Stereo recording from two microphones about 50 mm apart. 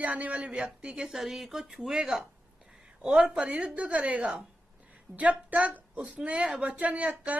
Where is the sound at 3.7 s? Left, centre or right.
Right.